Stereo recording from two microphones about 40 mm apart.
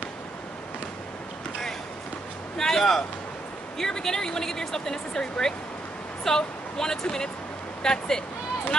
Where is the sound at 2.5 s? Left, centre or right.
Centre.